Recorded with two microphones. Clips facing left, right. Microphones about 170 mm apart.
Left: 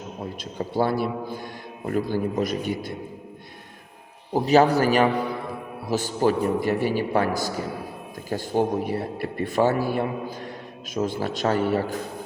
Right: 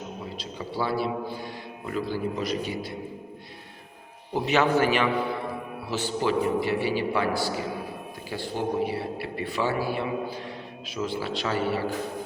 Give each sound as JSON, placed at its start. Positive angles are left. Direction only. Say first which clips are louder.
{"t": 0.3, "sound": "a man's voice", "louder": "left 7 dB", "side_deg": 50}
{"t": 4.4, "sound": "a man's voice", "louder": "left 4 dB", "side_deg": 35}